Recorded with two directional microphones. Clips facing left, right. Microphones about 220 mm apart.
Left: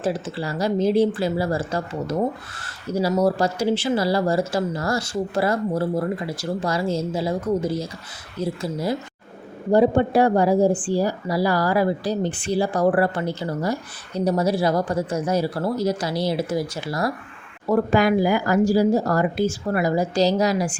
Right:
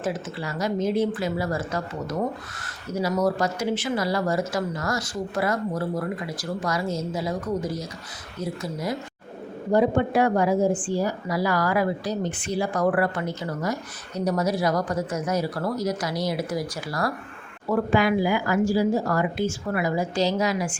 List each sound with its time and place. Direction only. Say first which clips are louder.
0.0 s speech: left 4 dB; 30° left (ahead or behind)
17.7 s speech: left 3 dB; 40° left (ahead or behind)